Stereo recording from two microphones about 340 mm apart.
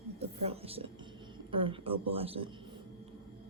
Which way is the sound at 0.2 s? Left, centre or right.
Centre.